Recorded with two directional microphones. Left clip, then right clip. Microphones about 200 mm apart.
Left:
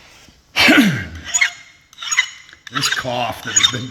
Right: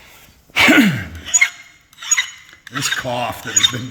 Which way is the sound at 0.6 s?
10° right (ahead or behind).